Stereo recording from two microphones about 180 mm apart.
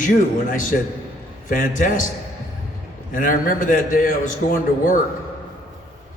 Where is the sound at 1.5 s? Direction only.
50° left (ahead or behind).